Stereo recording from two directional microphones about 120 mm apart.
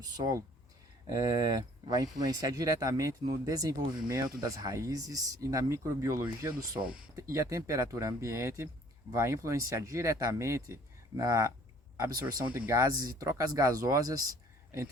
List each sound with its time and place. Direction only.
0.2 s a man's voice: 30° right (ahead or behind)
12.2 s speech: 15° right (ahead or behind)
12.7 s speech: 30° right (ahead or behind)